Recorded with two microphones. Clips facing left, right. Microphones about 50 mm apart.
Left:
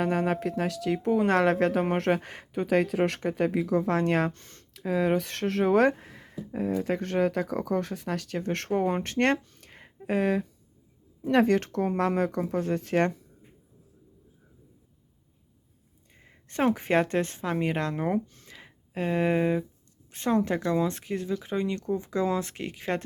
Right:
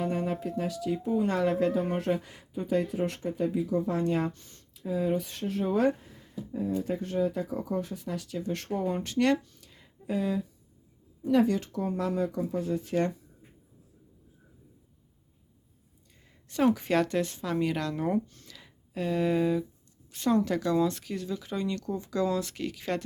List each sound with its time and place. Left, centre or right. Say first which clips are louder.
0.0 s speech: left 4 dB; left
16.1 s speech: even; left